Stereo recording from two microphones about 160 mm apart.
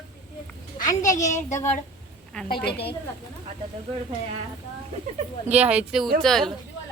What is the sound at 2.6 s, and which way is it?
Speech, 90° left.